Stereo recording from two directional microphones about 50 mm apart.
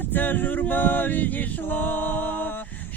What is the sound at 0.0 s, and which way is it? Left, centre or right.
Mantra, left.